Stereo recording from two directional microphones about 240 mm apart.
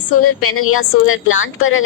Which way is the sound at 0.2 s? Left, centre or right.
Left.